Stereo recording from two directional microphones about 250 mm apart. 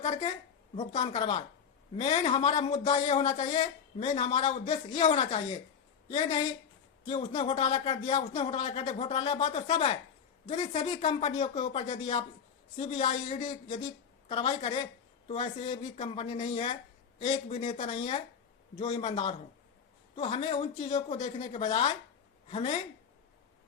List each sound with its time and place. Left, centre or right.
0.0 s speech: left